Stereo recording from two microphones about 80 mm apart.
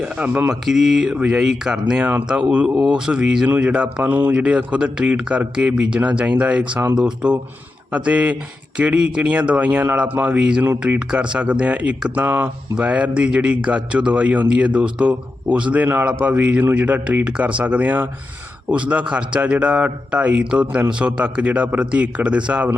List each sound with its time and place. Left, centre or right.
0.0 s a man's voice: centre
0.6 s a man's voice: centre
2.6 s a man's voice: centre